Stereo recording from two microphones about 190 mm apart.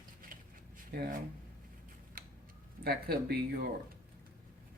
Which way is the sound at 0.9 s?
55° right (ahead or behind).